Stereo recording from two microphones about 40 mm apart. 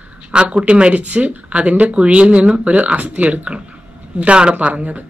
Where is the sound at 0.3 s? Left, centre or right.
Right.